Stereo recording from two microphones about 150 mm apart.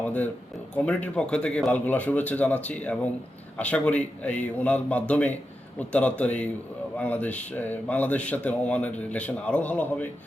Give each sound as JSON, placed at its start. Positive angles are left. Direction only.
{"t": 0.0, "sound": "a man's voice", "side_deg": 10}